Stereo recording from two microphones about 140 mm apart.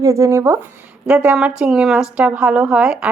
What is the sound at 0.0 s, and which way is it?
Speech, 20° right (ahead or behind).